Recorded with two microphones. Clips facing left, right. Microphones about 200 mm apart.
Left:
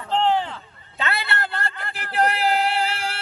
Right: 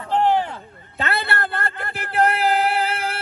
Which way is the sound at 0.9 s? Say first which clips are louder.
Right 2 dB; 55° right (ahead or behind).